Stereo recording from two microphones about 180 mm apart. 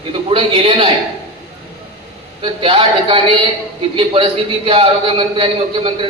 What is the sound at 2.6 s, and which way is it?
A man's voice, 30° right (ahead or behind).